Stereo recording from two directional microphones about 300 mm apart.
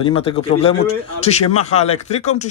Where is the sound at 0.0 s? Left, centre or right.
Centre.